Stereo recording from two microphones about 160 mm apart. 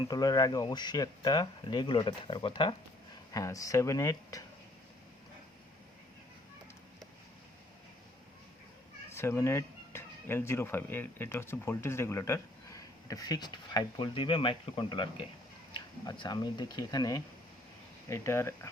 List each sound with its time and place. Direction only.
0.1 s speech: 25° left (ahead or behind)
3.3 s speech: 20° left (ahead or behind)
9.1 s speech: 15° left (ahead or behind)